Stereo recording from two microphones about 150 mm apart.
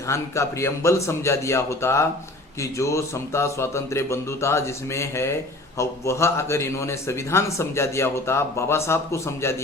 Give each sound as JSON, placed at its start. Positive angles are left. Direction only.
{"t": 0.1, "sound": "speech", "side_deg": 20}